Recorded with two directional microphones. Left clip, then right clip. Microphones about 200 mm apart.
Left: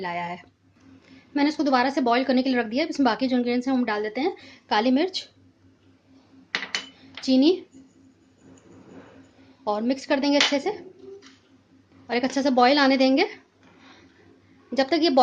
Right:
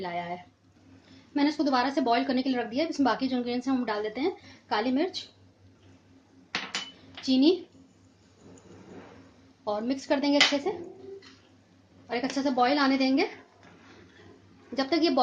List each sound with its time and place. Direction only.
0.0 s a woman's voice: 25° left (ahead or behind)
7.3 s speech: 30° left (ahead or behind)
9.6 s a woman's voice: 35° left (ahead or behind)
12.0 s a woman's voice: 40° left (ahead or behind)
14.8 s a woman's voice: 35° left (ahead or behind)